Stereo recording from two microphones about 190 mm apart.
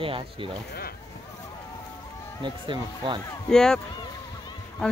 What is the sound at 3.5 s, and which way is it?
Speech, 5° left (ahead or behind).